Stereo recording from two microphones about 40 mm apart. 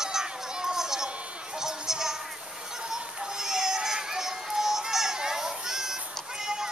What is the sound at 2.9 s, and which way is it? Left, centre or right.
Children playing, centre.